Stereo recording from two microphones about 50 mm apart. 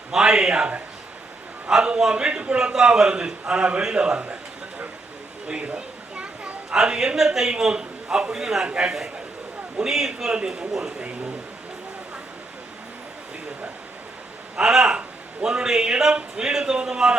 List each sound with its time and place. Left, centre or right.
0.1 s a man's voice: centre
1.7 s a man's voice: centre
5.5 s children playing: right
7.2 s a man's voice: centre
8.6 s a man's voice: right
9.7 s a man's voice: centre
10.7 s a man's voice: centre
14.6 s a man's voice: centre